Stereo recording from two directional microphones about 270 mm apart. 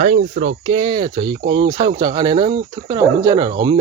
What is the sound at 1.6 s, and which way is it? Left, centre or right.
Speech, centre.